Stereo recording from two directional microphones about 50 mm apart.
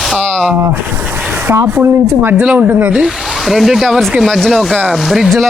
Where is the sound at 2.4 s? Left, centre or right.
Right.